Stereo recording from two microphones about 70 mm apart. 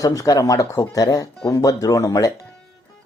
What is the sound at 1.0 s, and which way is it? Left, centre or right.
Speech, left.